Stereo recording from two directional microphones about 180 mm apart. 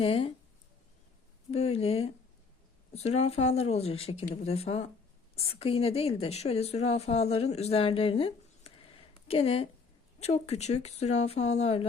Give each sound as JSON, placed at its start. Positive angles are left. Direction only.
{"t": 0.0, "sound": "speech", "side_deg": 30}
{"t": 1.5, "sound": "a woman's voice", "side_deg": 35}